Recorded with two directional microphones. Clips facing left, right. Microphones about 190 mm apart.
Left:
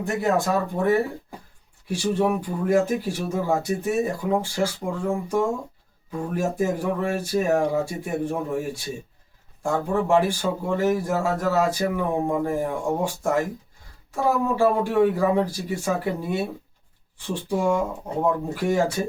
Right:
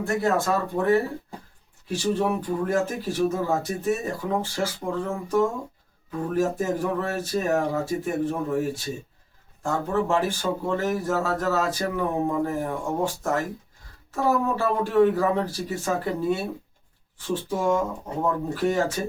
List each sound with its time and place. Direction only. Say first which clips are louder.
0.0 s speech: left 1 dB; 15° left (ahead or behind)
14.5 s speech: left 2 dB; 10° left (ahead or behind)
17.2 s speech: left 1 dB; 15° left (ahead or behind)